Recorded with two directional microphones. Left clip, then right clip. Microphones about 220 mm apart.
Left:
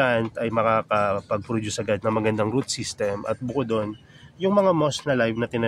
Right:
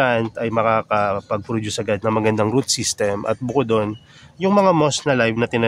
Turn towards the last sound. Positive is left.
turn(degrees=-25)  # may be behind; listen again after turning